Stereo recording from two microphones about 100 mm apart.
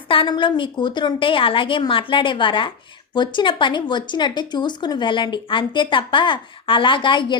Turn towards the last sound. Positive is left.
turn(degrees=55)  # may be behind; listen again after turning